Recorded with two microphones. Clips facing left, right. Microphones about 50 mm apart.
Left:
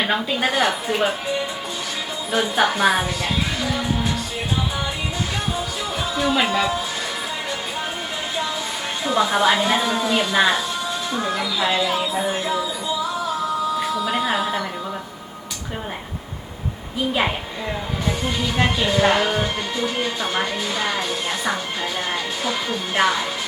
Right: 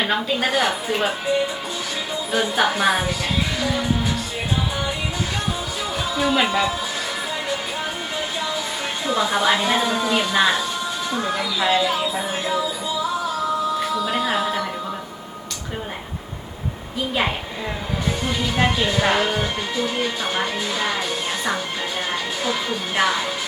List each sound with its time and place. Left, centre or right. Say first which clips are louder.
0.0 s speech: even; centre
2.3 s speech: left 1 dB; centre
3.6 s music: right 1 dB; centre
6.1 s speech: even; centre
9.0 s speech: left 2 dB; centre
13.7 s music: even; centre
18.2 s speech: right 1 dB; centre
23.0 s speech: left 1 dB; centre